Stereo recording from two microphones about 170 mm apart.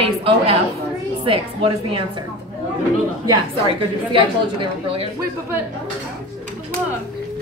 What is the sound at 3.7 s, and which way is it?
A woman's voice, 30° right (ahead or behind).